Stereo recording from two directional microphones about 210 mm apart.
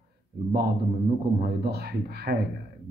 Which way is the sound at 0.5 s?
45° right (ahead or behind).